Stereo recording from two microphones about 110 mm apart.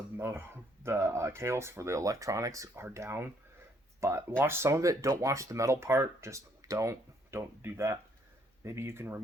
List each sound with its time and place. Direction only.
0.2 s speech: 20° right (ahead or behind)